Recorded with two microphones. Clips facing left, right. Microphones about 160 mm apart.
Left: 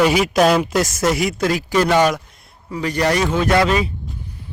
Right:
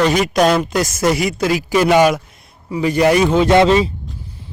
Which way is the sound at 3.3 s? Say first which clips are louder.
Right 5 dB; 25° right (ahead or behind).